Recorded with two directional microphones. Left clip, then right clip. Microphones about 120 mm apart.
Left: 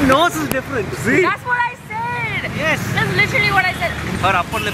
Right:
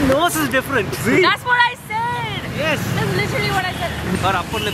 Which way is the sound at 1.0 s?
25° right (ahead or behind).